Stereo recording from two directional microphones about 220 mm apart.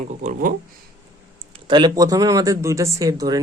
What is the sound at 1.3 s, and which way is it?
Speech, 20° right (ahead or behind).